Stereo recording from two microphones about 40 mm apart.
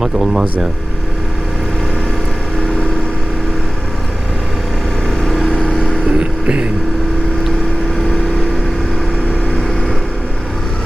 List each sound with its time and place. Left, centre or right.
0.0 s speech: centre
5.2 s vehicle: centre
6.1 s vehicle: right